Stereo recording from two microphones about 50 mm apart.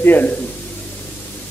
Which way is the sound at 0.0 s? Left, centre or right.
Left.